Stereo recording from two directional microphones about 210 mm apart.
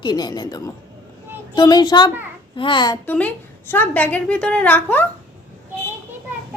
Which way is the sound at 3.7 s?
10° left (ahead or behind).